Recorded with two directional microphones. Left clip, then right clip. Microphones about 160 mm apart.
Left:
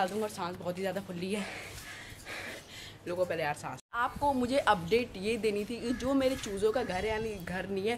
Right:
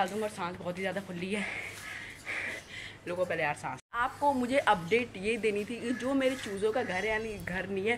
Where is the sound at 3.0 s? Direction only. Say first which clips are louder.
Right 1 dB; 10° left (ahead or behind).